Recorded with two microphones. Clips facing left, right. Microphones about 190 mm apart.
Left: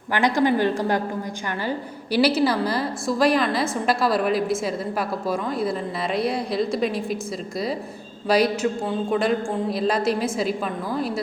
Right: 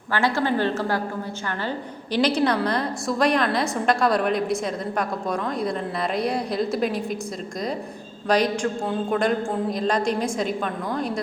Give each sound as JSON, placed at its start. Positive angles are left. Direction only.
{"t": 0.1, "sound": "a woman's voice", "side_deg": 15}
{"t": 2.1, "sound": "a woman's voice", "side_deg": 5}
{"t": 8.3, "sound": "a woman's voice", "side_deg": 5}